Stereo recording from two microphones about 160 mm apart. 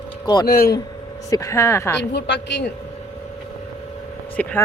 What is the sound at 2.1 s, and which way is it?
Speech, 90° left.